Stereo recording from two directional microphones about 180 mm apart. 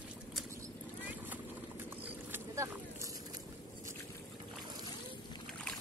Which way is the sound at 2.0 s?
10° right (ahead or behind).